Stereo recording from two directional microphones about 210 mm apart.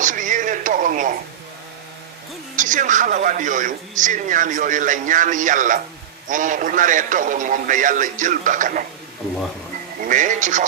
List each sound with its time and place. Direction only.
0.0 s a sound: 40° right (ahead or behind)
2.5 s a man's voice: 40° right (ahead or behind)
10.0 s a man's voice: 40° right (ahead or behind)